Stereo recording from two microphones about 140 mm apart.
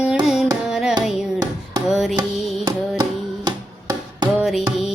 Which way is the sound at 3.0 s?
30° right (ahead or behind).